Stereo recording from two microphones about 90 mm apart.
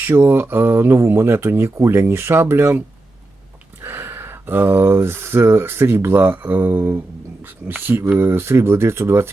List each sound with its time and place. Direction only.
0.0 s speech: 25° right (ahead or behind)
3.8 s speech: 25° right (ahead or behind)